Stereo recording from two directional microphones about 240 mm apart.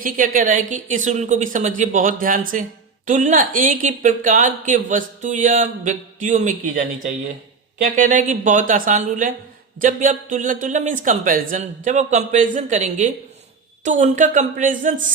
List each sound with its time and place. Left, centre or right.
0.0 s a woman's voice: right